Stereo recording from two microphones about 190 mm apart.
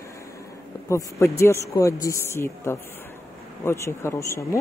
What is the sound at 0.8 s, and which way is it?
Speech, 15° left (ahead or behind).